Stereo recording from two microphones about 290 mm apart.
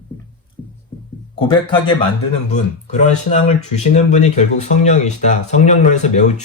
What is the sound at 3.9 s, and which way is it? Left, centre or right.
Speech, left.